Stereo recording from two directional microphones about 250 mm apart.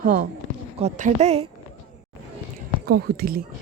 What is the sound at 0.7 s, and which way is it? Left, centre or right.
Speech, right.